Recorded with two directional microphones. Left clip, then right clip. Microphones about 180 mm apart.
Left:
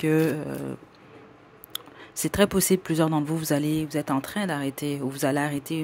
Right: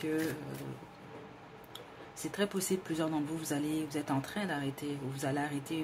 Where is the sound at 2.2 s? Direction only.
45° left (ahead or behind).